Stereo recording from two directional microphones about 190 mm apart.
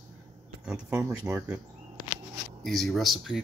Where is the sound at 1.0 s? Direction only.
15° right (ahead or behind).